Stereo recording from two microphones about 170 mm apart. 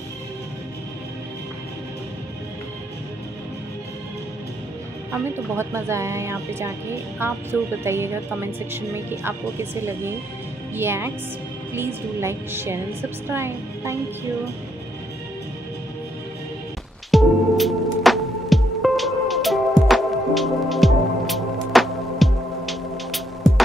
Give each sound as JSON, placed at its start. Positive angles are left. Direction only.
{"t": 5.1, "sound": "speech", "side_deg": -15}
{"t": 17.1, "sound": "music", "side_deg": 0}